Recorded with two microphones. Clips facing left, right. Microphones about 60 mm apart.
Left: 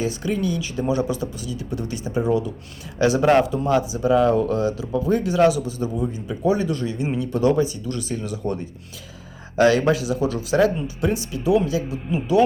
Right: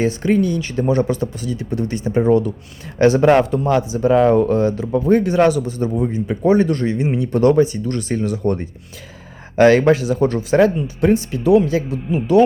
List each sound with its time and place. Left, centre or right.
0.0 s speech: right